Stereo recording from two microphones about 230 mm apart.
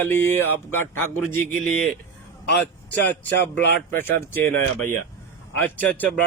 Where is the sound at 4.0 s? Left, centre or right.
Centre.